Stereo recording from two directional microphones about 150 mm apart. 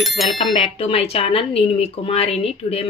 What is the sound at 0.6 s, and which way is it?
Speech, 40° left (ahead or behind).